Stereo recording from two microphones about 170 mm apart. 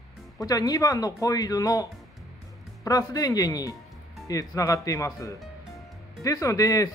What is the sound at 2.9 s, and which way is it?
Speech, 20° left (ahead or behind).